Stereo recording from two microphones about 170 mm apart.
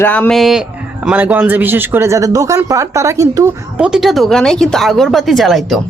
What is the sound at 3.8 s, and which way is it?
A woman's voice, 5° right (ahead or behind).